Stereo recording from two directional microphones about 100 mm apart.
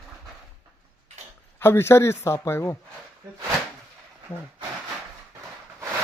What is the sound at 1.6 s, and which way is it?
Speech, 25° left (ahead or behind).